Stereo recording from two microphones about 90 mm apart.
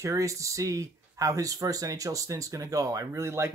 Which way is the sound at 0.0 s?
35° right (ahead or behind).